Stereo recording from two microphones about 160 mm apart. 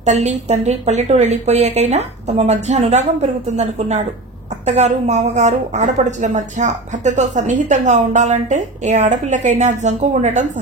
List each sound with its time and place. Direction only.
0.0 s a woman's voice: 45° right (ahead or behind)